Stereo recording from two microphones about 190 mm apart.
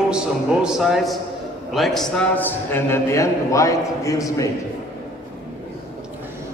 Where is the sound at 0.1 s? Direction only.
5° right (ahead or behind); by 4.5 s 15° left (ahead or behind).